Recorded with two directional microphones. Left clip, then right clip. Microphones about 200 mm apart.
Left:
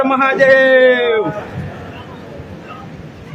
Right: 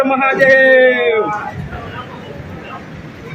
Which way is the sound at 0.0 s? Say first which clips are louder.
Even; 20° left (ahead or behind).